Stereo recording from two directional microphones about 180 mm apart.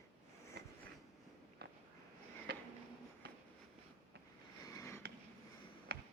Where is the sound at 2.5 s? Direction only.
60° right (ahead or behind).